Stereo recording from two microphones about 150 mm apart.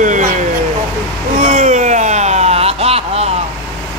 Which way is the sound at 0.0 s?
60° right (ahead or behind).